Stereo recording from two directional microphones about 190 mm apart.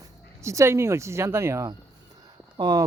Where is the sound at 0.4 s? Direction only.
15° right (ahead or behind).